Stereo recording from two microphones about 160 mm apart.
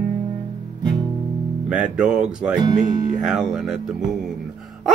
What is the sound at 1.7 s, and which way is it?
Speech, 5° right (ahead or behind).